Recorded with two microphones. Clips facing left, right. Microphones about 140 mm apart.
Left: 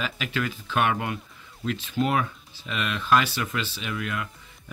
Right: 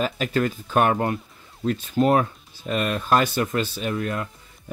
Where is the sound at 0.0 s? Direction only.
45° right (ahead or behind).